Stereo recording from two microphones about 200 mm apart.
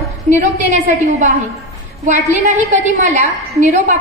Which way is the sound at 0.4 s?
35° right (ahead or behind).